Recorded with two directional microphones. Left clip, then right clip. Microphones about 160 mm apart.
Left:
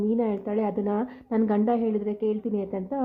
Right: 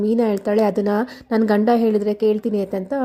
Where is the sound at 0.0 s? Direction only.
40° right (ahead or behind).